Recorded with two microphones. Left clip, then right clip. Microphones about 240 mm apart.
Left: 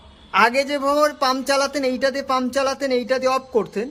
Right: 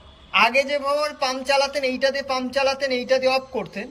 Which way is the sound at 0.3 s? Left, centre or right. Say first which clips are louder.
Left 1 dB; centre.